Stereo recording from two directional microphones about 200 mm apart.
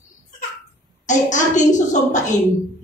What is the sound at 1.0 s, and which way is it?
A woman's voice, 40° left (ahead or behind).